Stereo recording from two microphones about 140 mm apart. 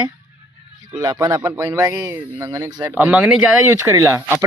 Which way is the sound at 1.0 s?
25° right (ahead or behind).